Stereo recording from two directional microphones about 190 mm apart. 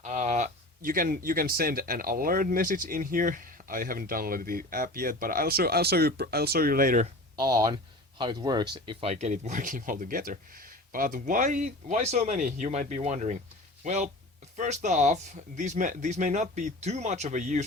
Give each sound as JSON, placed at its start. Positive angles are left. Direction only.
{"t": 0.0, "sound": "speech", "side_deg": -40}
{"t": 7.3, "sound": "speech", "side_deg": -20}